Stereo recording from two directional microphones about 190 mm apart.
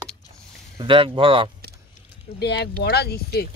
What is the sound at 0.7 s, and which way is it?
Speech, 25° right (ahead or behind).